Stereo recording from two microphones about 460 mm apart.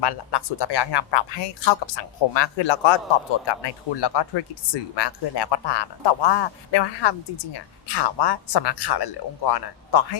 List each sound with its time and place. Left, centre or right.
0.0 s speech: left